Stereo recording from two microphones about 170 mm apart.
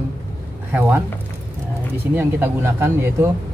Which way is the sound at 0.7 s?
10° right (ahead or behind).